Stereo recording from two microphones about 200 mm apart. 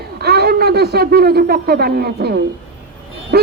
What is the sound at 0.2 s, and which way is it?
A man's voice, 50° right (ahead or behind).